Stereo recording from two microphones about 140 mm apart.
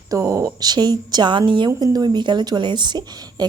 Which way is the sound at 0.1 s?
20° right (ahead or behind).